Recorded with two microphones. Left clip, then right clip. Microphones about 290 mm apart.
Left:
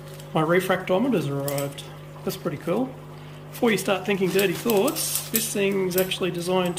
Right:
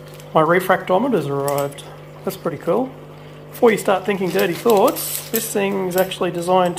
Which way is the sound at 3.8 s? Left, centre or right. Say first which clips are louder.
Right 5 dB; centre.